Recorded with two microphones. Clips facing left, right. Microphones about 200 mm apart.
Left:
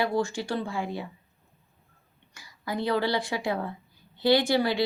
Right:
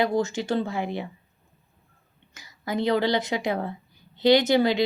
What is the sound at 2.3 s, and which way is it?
A woman's voice, 20° right (ahead or behind).